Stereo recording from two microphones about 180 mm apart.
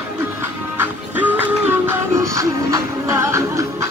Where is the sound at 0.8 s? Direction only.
10° right (ahead or behind).